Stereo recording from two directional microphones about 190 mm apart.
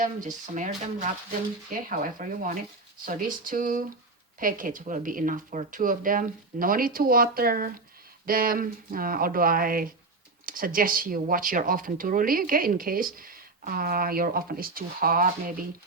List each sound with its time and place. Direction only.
0.0 s speech: 40° right (ahead or behind)